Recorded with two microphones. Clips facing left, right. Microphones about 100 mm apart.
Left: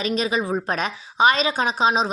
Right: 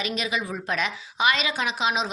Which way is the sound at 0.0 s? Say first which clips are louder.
Left 6 dB; 35° left (ahead or behind).